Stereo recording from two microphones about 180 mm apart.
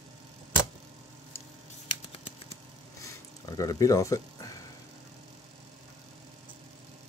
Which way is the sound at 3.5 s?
20° left (ahead or behind).